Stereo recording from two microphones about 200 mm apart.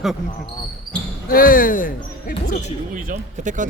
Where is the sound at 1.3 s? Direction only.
45° left (ahead or behind).